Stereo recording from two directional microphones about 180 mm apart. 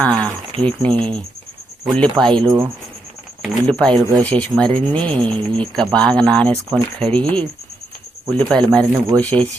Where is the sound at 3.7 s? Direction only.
5° left (ahead or behind).